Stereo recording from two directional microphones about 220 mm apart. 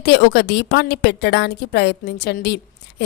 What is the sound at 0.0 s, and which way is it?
A woman's voice, 50° left (ahead or behind).